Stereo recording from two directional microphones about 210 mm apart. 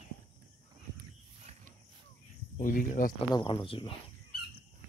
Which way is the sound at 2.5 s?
40° left (ahead or behind).